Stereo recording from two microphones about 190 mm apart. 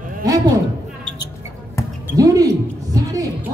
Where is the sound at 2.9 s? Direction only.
20° right (ahead or behind).